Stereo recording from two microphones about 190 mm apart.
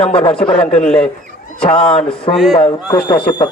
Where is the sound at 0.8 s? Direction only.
5° left (ahead or behind).